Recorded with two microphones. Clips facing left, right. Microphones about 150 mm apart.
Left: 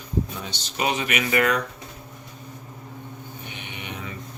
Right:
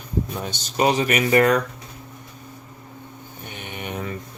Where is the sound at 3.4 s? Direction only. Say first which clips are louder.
Right 6 dB; 45° right (ahead or behind).